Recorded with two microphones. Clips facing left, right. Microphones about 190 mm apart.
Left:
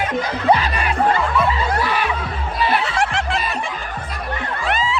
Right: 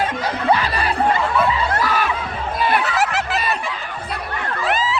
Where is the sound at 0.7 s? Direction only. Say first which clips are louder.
Right 1 dB; 35° right (ahead or behind).